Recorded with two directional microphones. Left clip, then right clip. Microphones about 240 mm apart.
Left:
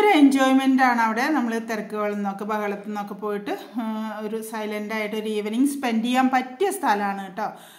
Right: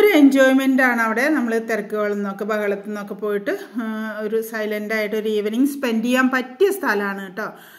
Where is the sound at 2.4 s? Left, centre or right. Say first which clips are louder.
Right 5 dB; left.